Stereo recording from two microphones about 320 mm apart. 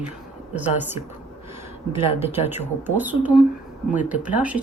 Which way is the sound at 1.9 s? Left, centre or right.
Centre.